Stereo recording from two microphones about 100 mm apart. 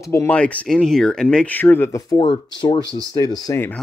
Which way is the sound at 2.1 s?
45° left (ahead or behind).